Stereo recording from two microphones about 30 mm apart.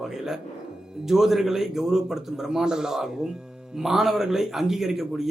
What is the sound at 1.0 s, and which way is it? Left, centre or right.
A man's voice, centre.